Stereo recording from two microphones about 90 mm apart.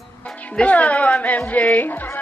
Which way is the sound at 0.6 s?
15° left (ahead or behind).